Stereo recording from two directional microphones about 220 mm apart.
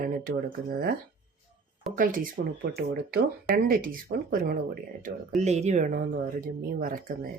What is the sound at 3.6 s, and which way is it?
Speech, 40° right (ahead or behind).